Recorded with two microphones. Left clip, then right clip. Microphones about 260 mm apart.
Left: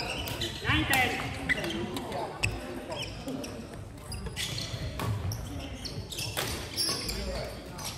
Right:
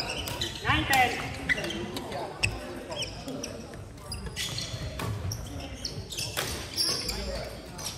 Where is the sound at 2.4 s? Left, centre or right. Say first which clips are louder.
Right 4 dB; centre.